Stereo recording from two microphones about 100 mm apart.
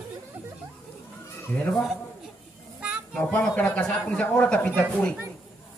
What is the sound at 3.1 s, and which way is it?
A man's voice, 10° left (ahead or behind).